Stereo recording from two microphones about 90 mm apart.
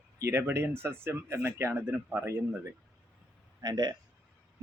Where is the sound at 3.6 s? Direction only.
50° right (ahead or behind).